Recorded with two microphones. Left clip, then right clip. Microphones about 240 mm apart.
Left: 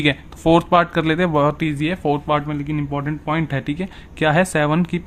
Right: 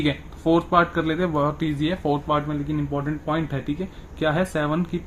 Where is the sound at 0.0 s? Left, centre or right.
Left.